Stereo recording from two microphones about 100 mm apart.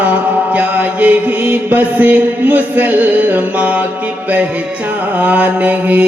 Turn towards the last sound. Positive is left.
turn(degrees=-15)  # may be behind; listen again after turning